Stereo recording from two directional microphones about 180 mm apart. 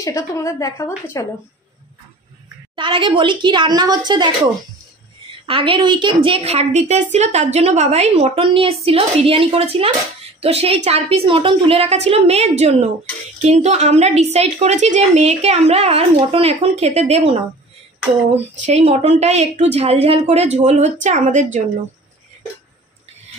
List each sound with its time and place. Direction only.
0.0 s a woman's voice: 15° left (ahead or behind)
2.7 s a woman's voice: 30° right (ahead or behind)
5.5 s a woman's voice: 30° right (ahead or behind)